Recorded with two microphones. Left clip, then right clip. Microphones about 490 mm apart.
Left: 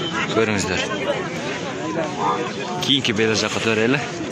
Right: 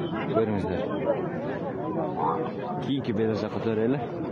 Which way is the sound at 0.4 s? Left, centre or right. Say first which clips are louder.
Left 6 dB; right.